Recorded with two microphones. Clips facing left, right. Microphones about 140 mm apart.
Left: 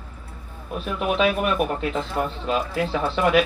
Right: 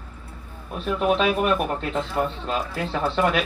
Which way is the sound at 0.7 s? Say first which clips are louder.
Right 2 dB; 5° left (ahead or behind).